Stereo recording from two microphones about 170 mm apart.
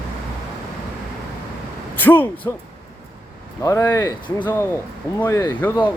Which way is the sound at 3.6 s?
15° left (ahead or behind).